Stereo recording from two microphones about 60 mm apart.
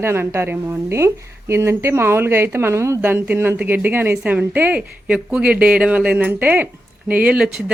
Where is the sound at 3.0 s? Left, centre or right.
Right.